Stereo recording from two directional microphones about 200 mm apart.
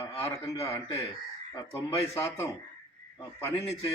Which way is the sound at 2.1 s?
15° left (ahead or behind).